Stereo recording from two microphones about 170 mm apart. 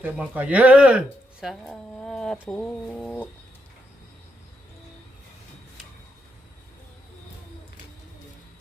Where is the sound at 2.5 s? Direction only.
5° left (ahead or behind).